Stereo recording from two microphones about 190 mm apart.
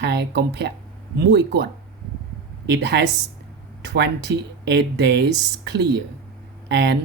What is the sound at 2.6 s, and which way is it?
Speech, 65° right (ahead or behind).